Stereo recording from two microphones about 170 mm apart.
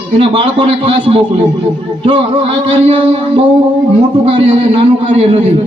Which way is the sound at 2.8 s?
35° right (ahead or behind).